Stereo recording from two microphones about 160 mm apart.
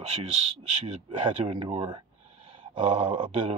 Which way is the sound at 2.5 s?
30° right (ahead or behind).